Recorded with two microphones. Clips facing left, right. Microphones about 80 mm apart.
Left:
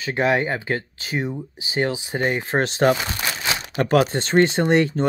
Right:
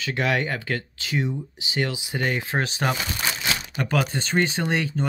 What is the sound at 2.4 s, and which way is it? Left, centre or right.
Speech, left.